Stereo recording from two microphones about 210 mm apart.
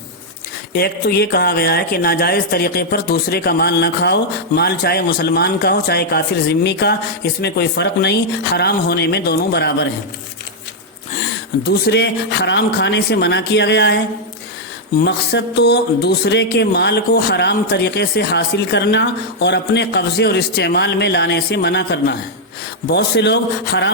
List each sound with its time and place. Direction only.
0.7 s speech: 50° left (ahead or behind)
11.9 s speech: 55° left (ahead or behind)
15.0 s speech: 55° left (ahead or behind)